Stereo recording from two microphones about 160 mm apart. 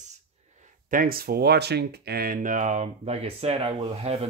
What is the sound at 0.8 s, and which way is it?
Speech, 60° right (ahead or behind).